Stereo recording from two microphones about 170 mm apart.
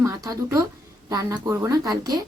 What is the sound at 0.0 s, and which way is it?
A woman's voice, 20° right (ahead or behind).